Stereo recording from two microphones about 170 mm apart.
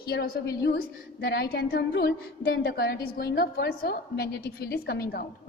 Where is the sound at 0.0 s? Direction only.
70° left (ahead or behind).